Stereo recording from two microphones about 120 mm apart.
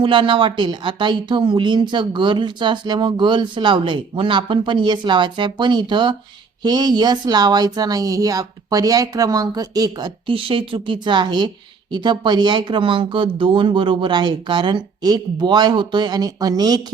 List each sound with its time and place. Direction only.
0.0 s speech: 45° right (ahead or behind)
10.2 s speech: 45° right (ahead or behind)